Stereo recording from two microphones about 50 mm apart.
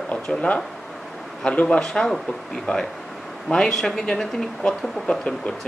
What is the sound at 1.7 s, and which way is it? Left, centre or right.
Speech, centre.